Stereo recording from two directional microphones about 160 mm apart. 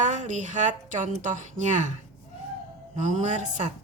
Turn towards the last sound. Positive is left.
turn(degrees=-50)  # may be behind; listen again after turning